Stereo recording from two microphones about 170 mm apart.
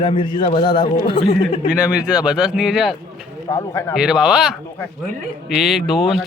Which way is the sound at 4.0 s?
5° right (ahead or behind).